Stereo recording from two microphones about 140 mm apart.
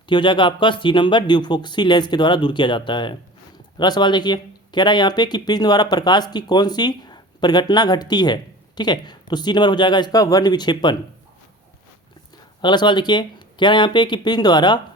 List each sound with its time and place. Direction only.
0.1 s speech: 35° left (ahead or behind)
12.6 s speech: 35° left (ahead or behind)